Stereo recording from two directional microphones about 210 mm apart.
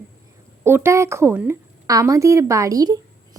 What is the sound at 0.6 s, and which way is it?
A woman's voice, 10° right (ahead or behind).